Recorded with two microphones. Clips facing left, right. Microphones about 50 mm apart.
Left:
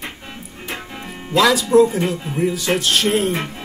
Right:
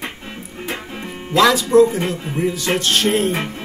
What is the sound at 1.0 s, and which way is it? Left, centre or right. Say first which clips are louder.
Speech: right 1 dB; centre.